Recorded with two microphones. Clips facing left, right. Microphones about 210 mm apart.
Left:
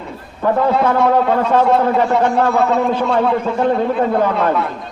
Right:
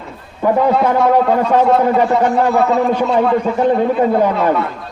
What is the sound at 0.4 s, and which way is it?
A man's voice, 10° right (ahead or behind).